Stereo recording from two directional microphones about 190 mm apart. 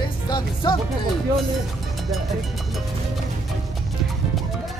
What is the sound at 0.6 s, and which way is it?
Speech, 20° left (ahead or behind).